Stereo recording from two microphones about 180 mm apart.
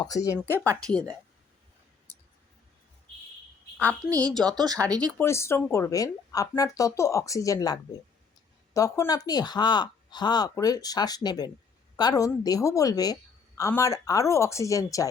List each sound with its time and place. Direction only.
0.1 s speech: 20° left (ahead or behind)
3.8 s speech: 10° left (ahead or behind)
4.5 s speech: 20° right (ahead or behind)
5.1 s speech: 15° left (ahead or behind)